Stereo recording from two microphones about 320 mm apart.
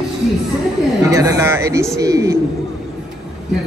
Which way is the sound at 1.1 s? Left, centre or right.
Centre.